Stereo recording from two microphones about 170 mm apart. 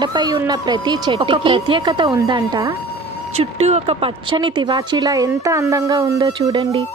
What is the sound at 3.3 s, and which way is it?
Speech, 35° right (ahead or behind).